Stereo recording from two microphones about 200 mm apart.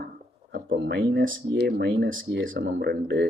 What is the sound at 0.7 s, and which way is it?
Speech, 60° right (ahead or behind).